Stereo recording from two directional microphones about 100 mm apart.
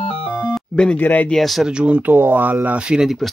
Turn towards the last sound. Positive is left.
turn(degrees=-10)  # may be behind; listen again after turning